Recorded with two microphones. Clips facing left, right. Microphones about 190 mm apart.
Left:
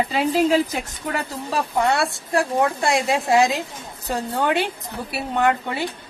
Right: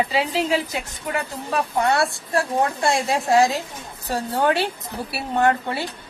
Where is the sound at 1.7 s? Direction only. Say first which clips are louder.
Even; 20° left (ahead or behind).